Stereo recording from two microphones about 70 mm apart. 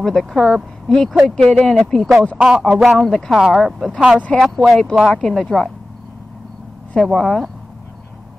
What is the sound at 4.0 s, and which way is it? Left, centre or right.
Speech, centre.